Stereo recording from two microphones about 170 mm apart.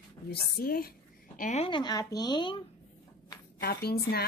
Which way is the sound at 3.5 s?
65° left (ahead or behind).